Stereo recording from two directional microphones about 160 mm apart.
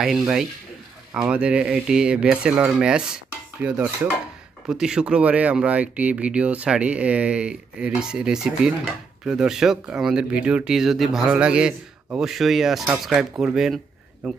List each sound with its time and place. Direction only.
0.0 s speech: 5° right (ahead or behind)
3.6 s cutlery: 10° right (ahead or behind)
4.6 s speech: 5° right (ahead or behind)